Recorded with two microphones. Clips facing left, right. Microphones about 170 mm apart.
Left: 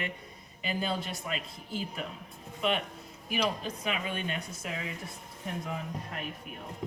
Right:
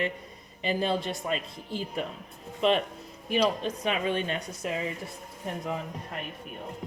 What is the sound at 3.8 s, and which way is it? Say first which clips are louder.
Speech: right 6 dB; 30° right (ahead or behind).